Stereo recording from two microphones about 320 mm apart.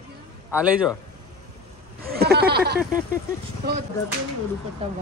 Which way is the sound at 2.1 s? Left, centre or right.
Right.